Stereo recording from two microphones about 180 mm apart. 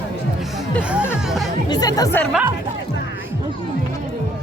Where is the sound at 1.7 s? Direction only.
20° left (ahead or behind).